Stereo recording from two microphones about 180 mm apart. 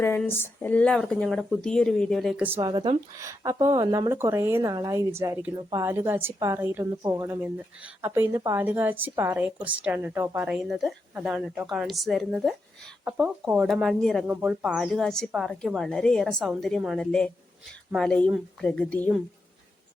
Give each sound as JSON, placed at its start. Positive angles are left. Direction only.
{"t": 0.0, "sound": "a woman's voice", "side_deg": 10}
{"t": 2.6, "sound": "a woman's voice", "side_deg": -25}